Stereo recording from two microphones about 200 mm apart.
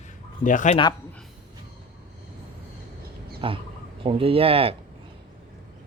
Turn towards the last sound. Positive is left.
turn(degrees=-30)  # may be behind; listen again after turning